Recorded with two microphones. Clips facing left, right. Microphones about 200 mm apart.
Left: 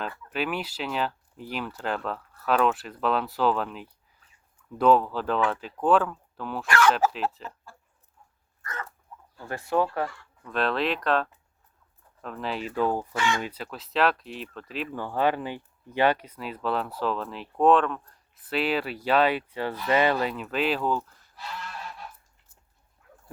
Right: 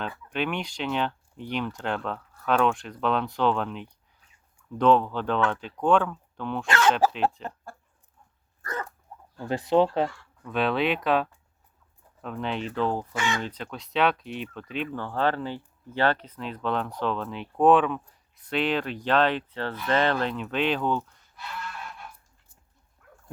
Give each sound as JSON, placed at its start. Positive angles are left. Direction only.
{"t": 0.3, "sound": "speech", "side_deg": 5}
{"t": 6.7, "sound": "speech", "side_deg": -25}
{"t": 7.1, "sound": "speech", "side_deg": 5}
{"t": 8.6, "sound": "dog", "side_deg": -35}
{"t": 9.4, "sound": "speech", "side_deg": -20}
{"t": 10.4, "sound": "speech", "side_deg": 0}
{"t": 13.1, "sound": "speech", "side_deg": -20}
{"t": 13.4, "sound": "speech", "side_deg": 5}